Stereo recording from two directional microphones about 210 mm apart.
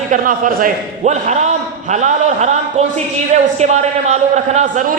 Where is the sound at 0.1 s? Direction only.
40° right (ahead or behind).